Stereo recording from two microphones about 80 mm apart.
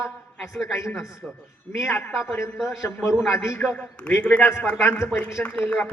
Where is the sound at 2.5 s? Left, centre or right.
Centre.